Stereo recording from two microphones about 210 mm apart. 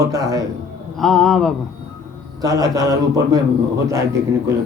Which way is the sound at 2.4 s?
15° right (ahead or behind).